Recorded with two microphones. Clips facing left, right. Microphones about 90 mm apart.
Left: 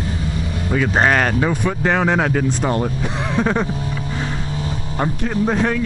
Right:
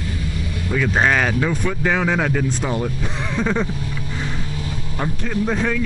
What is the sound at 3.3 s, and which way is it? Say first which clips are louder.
Speech: left 2 dB; 20° left (ahead or behind).